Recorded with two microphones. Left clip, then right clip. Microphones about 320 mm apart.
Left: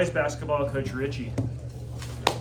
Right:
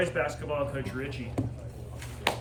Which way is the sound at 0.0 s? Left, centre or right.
Centre.